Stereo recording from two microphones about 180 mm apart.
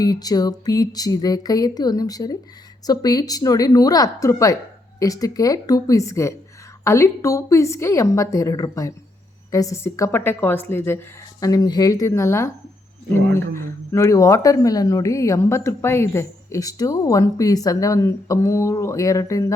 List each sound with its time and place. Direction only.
0.0 s speech: 20° left (ahead or behind)
13.6 s speech: 15° left (ahead or behind)